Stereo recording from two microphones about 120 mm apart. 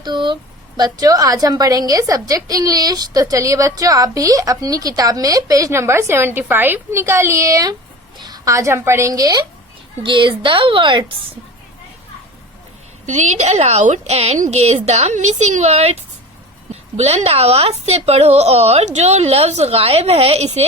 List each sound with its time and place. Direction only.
0.0 s a sound: 40° right (ahead or behind)
0.8 s a woman's voice: 30° right (ahead or behind)
10.0 s a woman's voice: 45° right (ahead or behind)
13.1 s a woman's voice: 75° right (ahead or behind)
17.0 s speech: 60° right (ahead or behind)